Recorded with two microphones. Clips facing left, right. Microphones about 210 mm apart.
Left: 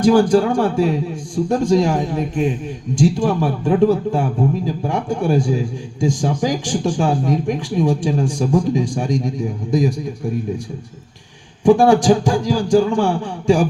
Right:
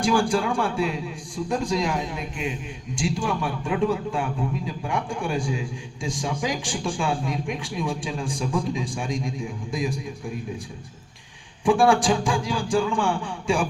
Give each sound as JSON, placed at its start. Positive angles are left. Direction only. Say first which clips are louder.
{"t": 0.1, "sound": "a man's voice", "louder": "left 9 dB", "side_deg": 40}
{"t": 11.6, "sound": "a man's voice", "louder": "left 7 dB", "side_deg": 40}